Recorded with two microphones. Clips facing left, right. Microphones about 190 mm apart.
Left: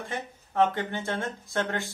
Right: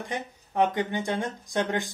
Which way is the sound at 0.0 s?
15° right (ahead or behind).